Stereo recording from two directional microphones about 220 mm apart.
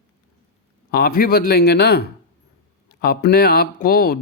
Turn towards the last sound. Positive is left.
turn(degrees=40)  # may be behind; listen again after turning